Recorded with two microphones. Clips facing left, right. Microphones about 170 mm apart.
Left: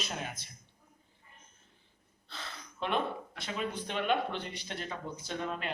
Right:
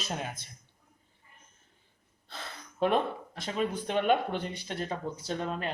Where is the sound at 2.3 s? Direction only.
45° right (ahead or behind).